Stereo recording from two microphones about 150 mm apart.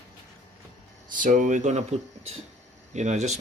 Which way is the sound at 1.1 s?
60° right (ahead or behind).